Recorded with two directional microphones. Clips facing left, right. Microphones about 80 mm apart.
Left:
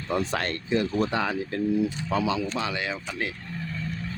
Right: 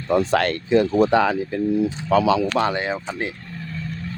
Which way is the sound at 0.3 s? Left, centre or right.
Right.